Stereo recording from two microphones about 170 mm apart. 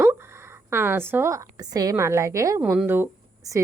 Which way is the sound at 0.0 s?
15° right (ahead or behind).